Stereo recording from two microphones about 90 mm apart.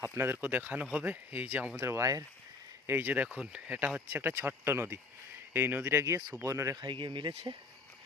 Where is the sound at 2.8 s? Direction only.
25° right (ahead or behind).